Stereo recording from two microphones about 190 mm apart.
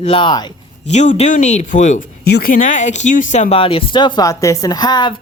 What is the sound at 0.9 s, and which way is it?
Speech, 35° left (ahead or behind).